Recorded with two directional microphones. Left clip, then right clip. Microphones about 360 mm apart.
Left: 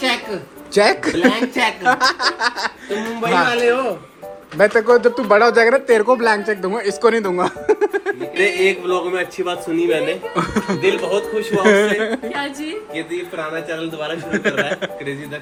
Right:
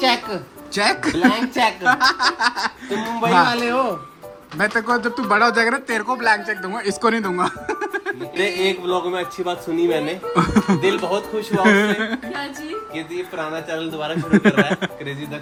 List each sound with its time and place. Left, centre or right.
0.0 s a sound: right
0.7 s a woman's voice: centre; by 3.9 s right
4.5 s a woman's voice: centre
14.0 s speech: centre